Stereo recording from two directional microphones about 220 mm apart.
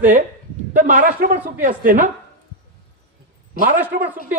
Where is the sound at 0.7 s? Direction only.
35° right (ahead or behind).